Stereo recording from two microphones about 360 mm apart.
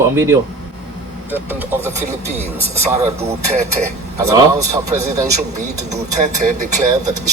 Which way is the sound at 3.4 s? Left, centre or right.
Right.